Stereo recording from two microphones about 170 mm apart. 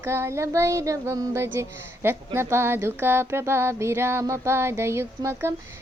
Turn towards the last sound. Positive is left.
turn(degrees=-15)  # may be behind; listen again after turning